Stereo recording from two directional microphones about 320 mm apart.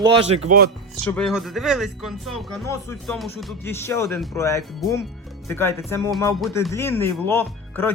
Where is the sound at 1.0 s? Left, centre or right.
Centre.